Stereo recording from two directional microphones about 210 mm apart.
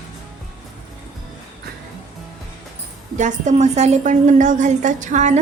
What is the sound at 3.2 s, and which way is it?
A woman's voice, 35° right (ahead or behind).